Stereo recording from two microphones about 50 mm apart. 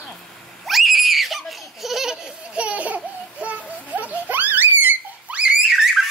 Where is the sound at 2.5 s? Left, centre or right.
Right.